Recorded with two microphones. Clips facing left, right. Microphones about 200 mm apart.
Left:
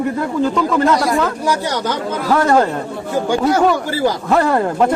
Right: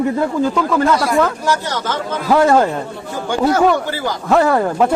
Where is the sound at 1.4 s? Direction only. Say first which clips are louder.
Left 1 dB; 15° left (ahead or behind).